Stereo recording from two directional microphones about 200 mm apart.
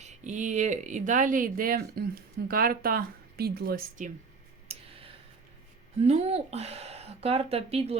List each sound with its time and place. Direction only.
0.0 s speech: 40° right (ahead or behind)
4.7 s clicking: 30° right (ahead or behind)
6.0 s a woman's voice: 35° right (ahead or behind)